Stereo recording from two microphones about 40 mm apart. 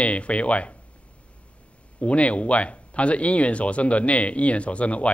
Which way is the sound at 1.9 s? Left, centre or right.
Left.